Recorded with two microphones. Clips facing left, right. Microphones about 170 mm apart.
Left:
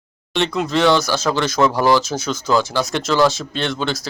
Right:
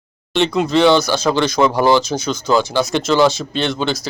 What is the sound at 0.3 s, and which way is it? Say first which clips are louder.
Speech: right 4 dB; centre (ahead or behind).